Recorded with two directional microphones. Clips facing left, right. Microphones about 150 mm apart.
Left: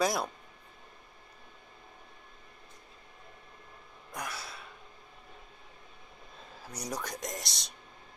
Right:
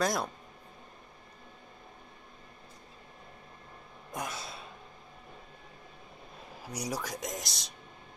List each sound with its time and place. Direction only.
0.0 s speech: 5° left (ahead or behind)
4.1 s a sound: 20° right (ahead or behind)
6.6 s speech: 10° right (ahead or behind)